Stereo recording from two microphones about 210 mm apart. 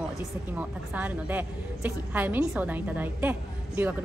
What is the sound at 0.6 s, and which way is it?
A woman's voice, 5° right (ahead or behind).